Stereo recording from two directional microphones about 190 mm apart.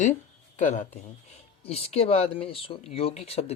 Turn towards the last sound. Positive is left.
turn(degrees=35)  # may be behind; listen again after turning